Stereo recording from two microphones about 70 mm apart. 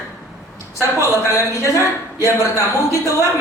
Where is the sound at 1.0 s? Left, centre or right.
Left.